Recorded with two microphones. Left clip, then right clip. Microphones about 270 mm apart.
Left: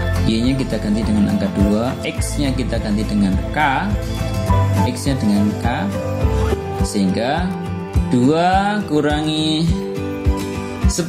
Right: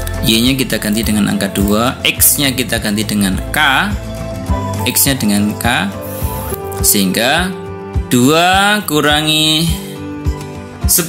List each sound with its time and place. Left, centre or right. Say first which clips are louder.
0.3 s speech: right 8 dB; right
4.8 s speech: right 5 dB; right
6.9 s speech: right 7 dB; right